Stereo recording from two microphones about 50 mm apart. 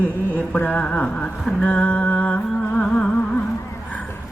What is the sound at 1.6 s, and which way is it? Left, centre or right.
Music, left.